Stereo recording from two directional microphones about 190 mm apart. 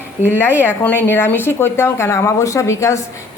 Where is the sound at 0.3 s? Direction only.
10° left (ahead or behind).